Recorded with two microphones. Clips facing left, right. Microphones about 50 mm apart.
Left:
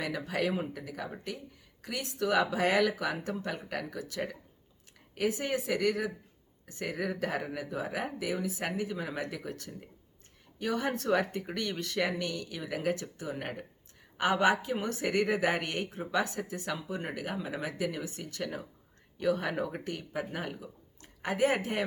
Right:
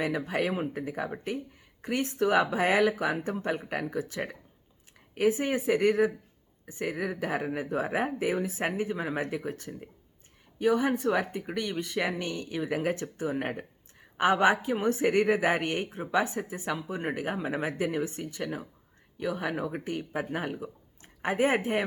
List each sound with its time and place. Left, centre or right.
0.0 s a woman's voice: right
6.8 s speech: centre
7.6 s a woman's voice: right; by 13.7 s centre
14.2 s a woman's voice: right
18.2 s speech: centre